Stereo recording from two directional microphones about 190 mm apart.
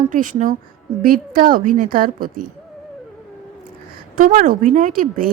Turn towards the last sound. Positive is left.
turn(degrees=-45)  # may be behind; listen again after turning